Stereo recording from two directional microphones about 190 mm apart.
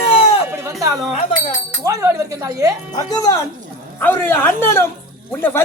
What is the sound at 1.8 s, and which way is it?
Speech, 15° right (ahead or behind).